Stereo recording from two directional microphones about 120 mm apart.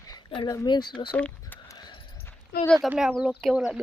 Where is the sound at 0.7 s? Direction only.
40° left (ahead or behind).